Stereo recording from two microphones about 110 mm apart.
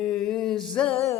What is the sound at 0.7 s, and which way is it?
Music, 10° left (ahead or behind).